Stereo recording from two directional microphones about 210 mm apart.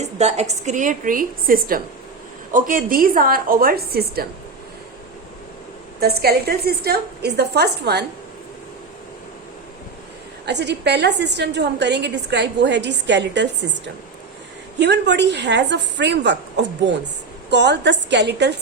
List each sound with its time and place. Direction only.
0.0 s a woman's voice: 30° right (ahead or behind); by 4.3 s 45° right (ahead or behind)
6.0 s a woman's voice: 50° right (ahead or behind)
10.4 s a woman's voice: 55° right (ahead or behind)